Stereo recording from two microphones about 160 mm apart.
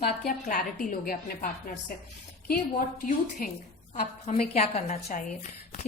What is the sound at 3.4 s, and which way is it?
Speech, 65° left (ahead or behind).